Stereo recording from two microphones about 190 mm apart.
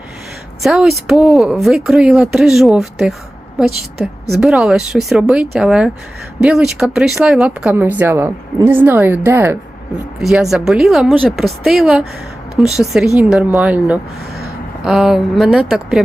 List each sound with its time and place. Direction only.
0.6 s speech: centre (ahead or behind)
10.2 s speech: centre (ahead or behind)